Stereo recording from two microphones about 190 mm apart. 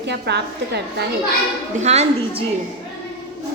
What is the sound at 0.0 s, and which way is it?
A woman's voice, 65° right (ahead or behind).